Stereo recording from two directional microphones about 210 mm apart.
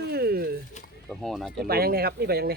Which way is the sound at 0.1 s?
45° right (ahead or behind).